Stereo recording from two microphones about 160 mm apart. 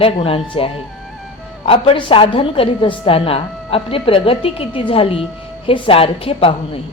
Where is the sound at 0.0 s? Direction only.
35° left (ahead or behind).